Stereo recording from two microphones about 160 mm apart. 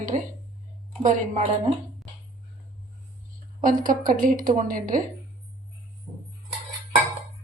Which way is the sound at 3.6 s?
60° right (ahead or behind).